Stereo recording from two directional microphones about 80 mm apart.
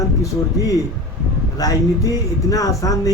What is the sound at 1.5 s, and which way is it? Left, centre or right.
Speech, left.